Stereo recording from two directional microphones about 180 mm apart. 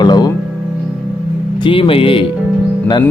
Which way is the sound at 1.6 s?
30° left (ahead or behind).